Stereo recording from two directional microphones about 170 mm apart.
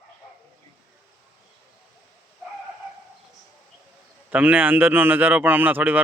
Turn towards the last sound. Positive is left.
turn(degrees=-10)  # may be behind; listen again after turning